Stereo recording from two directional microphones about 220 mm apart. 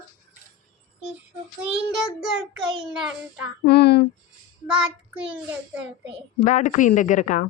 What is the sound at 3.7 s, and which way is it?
Speech, 45° left (ahead or behind).